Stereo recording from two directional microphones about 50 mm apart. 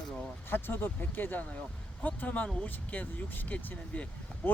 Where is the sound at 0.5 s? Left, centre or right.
Left.